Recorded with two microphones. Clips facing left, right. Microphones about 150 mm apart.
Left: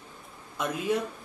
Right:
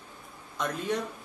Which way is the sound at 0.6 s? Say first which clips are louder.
Left 2 dB; 5° left (ahead or behind).